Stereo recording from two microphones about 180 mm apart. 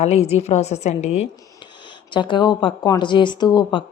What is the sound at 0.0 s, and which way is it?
A woman's voice, 35° left (ahead or behind).